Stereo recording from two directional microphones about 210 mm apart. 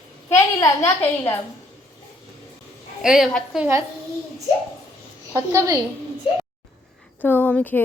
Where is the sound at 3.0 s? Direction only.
Centre (ahead or behind).